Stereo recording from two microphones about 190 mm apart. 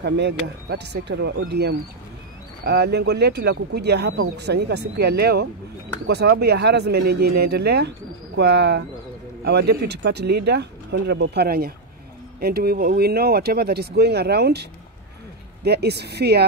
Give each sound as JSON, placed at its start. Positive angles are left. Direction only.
{"t": 0.0, "sound": "speech", "side_deg": -60}